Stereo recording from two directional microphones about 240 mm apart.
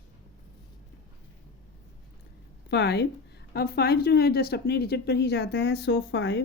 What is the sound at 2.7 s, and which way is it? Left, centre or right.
Speech, left.